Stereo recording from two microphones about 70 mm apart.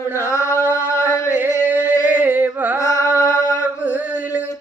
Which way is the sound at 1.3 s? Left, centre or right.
Right.